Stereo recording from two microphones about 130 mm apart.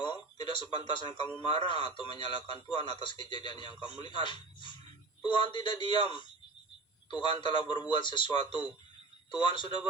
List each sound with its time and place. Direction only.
0.0 s a man's voice: 35° left (ahead or behind)